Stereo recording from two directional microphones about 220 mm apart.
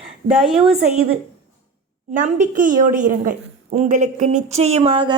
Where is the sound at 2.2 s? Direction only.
35° right (ahead or behind).